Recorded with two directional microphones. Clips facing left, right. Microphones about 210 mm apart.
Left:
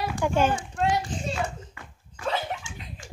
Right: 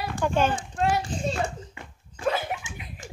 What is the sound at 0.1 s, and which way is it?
Speech, 10° left (ahead or behind).